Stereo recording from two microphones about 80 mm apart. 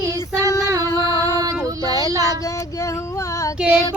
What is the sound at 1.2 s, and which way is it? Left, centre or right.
Female singing, right.